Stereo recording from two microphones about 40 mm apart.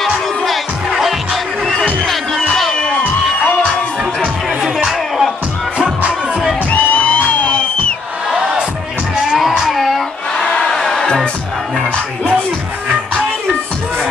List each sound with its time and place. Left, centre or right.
0.0 s music: centre
2.0 s music: centre
4.8 s music: centre
5.8 s music: right
6.7 s music: left
9.6 s a sound: centre
10.4 s crowd: centre